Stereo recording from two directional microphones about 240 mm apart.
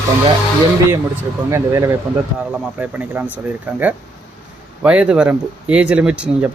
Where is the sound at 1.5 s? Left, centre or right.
Centre.